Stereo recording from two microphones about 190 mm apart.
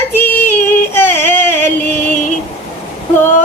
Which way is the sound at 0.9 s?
10° left (ahead or behind).